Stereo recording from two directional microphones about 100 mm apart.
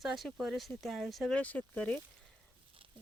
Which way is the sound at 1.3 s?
15° left (ahead or behind).